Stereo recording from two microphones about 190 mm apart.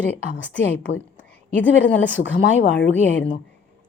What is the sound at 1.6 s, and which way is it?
A woman's voice, 70° left (ahead or behind).